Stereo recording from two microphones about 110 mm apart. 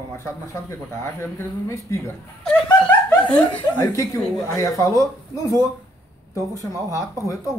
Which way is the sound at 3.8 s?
30° left (ahead or behind).